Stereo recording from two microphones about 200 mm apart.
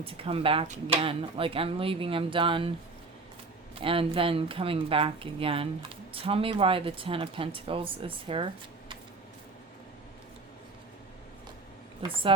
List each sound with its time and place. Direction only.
0.0 s speech: 30° right (ahead or behind)
3.8 s speech: 25° right (ahead or behind)